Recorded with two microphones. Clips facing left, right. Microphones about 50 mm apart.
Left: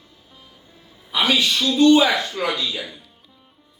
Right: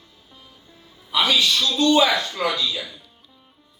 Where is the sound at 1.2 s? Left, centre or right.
Left.